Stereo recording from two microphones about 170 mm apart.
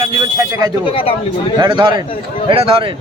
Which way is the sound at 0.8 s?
35° left (ahead or behind).